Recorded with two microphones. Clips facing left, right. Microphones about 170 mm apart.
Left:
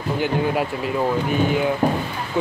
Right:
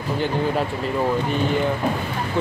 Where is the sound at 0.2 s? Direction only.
5° left (ahead or behind).